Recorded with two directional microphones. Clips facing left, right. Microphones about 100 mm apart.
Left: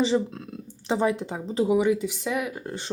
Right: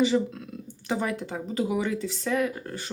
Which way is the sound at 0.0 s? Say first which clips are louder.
Even; 30° left (ahead or behind).